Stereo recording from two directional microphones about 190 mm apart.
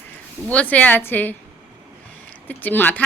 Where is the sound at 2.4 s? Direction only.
10° left (ahead or behind).